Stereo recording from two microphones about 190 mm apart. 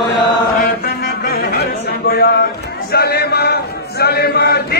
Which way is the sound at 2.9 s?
55° left (ahead or behind).